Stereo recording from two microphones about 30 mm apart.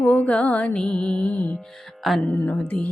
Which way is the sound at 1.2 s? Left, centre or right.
Left.